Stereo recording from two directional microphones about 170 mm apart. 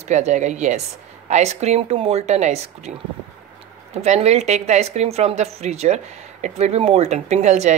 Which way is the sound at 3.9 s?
40° right (ahead or behind).